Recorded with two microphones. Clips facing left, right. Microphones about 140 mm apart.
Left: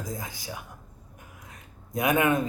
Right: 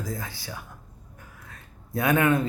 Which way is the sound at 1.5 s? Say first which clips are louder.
Right 7 dB; 20° left (ahead or behind).